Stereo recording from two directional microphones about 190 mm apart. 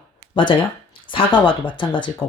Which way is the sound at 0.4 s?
25° left (ahead or behind).